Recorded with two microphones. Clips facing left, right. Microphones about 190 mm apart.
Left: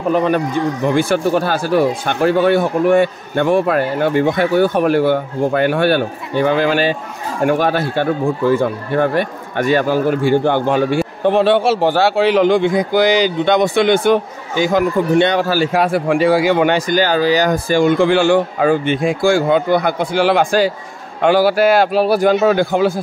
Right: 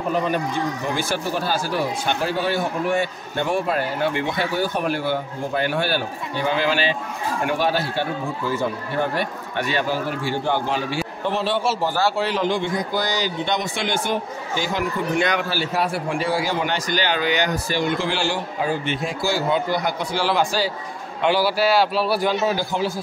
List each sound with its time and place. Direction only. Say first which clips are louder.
0.1 s a man's voice: left 8 dB; 60° left (ahead or behind)
4.1 s a man's voice: left 10 dB; 45° left (ahead or behind)
15.1 s a man's voice: left 8 dB; 30° left (ahead or behind)
15.6 s a man's voice: left 8 dB; 90° left; by 17.5 s 35° left (ahead or behind)
17.5 s a man's voice: left 9 dB; 50° left (ahead or behind)